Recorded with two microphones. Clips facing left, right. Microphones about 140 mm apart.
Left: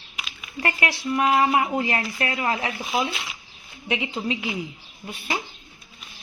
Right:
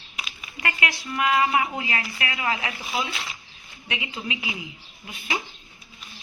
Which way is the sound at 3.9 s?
30° left (ahead or behind).